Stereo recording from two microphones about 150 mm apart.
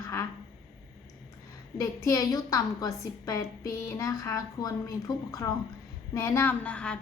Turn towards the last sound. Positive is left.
turn(degrees=5)  # may be behind; listen again after turning